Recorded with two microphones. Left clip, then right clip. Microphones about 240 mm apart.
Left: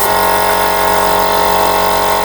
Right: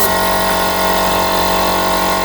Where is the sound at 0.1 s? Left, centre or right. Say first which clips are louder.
Left 3 dB; centre.